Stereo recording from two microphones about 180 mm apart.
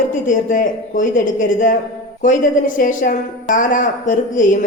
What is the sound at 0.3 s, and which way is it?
A man's voice, 50° left (ahead or behind).